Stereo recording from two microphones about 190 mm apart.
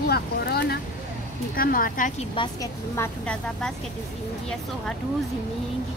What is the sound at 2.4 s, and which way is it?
Speech, 25° left (ahead or behind).